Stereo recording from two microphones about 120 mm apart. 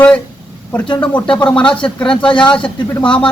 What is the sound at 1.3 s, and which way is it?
Speech, 10° left (ahead or behind).